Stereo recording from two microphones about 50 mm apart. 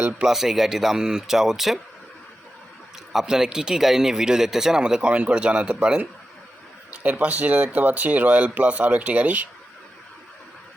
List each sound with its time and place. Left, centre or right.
0.3 s speech: centre
3.1 s speech: centre
6.9 s speech: right